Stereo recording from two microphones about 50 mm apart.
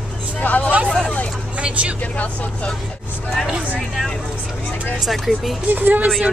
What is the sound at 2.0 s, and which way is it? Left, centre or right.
Speech, left.